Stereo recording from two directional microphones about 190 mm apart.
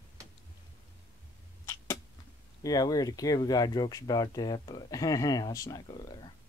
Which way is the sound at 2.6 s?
20° left (ahead or behind).